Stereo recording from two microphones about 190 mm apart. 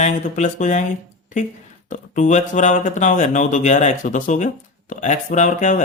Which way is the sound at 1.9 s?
40° left (ahead or behind).